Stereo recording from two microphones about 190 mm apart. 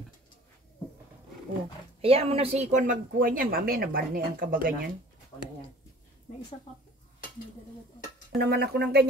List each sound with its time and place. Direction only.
2.0 s speech: 30° right (ahead or behind); by 4.8 s 50° right (ahead or behind)
8.4 s speech: 55° right (ahead or behind)